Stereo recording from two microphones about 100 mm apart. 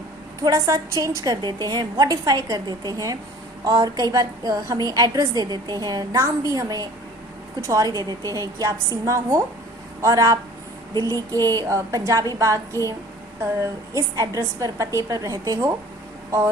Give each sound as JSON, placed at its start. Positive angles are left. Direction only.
{"t": 0.4, "sound": "a woman's voice", "side_deg": -30}